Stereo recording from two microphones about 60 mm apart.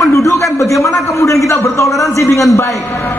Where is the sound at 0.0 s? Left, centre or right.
Left.